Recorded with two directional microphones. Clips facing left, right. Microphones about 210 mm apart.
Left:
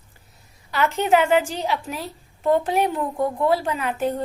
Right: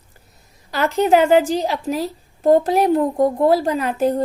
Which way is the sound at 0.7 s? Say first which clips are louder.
Right 4 dB; 40° right (ahead or behind).